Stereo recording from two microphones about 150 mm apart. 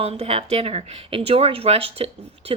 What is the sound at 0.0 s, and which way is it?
Speech, 45° right (ahead or behind).